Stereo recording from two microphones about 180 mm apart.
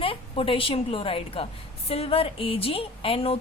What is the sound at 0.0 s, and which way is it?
A woman's voice, 30° left (ahead or behind).